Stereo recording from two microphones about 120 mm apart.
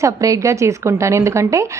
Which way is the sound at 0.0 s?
25° right (ahead or behind).